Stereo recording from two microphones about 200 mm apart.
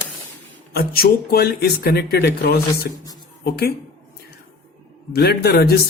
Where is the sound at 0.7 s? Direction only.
50° left (ahead or behind).